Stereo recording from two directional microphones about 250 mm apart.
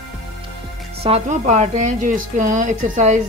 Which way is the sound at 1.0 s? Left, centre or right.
Right.